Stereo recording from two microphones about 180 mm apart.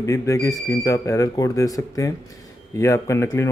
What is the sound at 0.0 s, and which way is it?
Speech, 15° left (ahead or behind).